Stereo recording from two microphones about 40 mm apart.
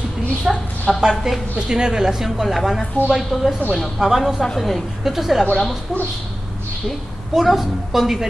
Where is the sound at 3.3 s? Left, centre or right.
Centre.